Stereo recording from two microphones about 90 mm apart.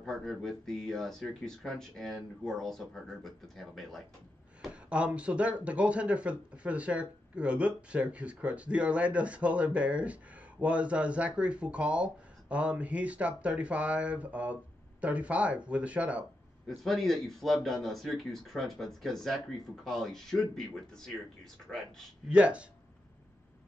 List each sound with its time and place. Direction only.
0.0 s a man's voice: 5° left (ahead or behind)
4.8 s speech: 10° right (ahead or behind)
16.6 s a man's voice: 5° left (ahead or behind)
22.3 s speech: 15° right (ahead or behind)